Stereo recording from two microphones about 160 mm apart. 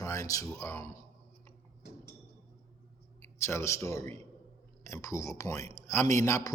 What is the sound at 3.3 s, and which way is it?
A man's voice, 15° left (ahead or behind).